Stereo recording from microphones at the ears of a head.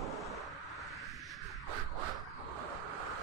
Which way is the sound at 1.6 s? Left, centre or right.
Right.